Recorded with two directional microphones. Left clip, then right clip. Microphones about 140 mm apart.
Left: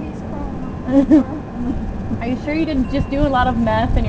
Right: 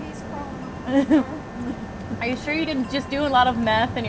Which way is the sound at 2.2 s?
25° right (ahead or behind).